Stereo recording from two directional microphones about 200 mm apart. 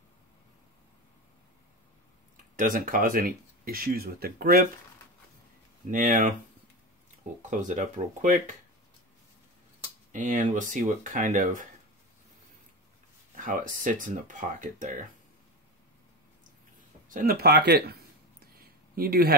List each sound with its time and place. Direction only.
2.5 s speech: 45° right (ahead or behind)
5.9 s speech: 40° right (ahead or behind)
7.4 s speech: 35° right (ahead or behind)
10.1 s speech: 40° right (ahead or behind)
13.4 s speech: 40° right (ahead or behind)
17.1 s speech: 45° right (ahead or behind)
18.6 s a sound: 50° right (ahead or behind)